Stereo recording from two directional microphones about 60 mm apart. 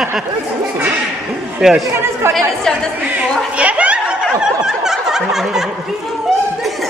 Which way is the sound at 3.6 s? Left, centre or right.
Right.